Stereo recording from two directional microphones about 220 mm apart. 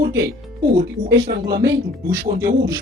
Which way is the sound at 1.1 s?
45° right (ahead or behind).